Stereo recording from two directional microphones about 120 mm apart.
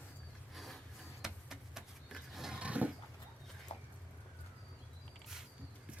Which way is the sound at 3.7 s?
70° left (ahead or behind).